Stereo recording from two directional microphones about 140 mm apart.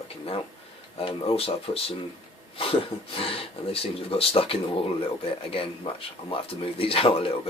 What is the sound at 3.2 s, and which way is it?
Speech, 40° left (ahead or behind).